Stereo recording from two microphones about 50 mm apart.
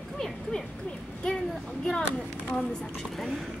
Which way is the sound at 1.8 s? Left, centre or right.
Centre.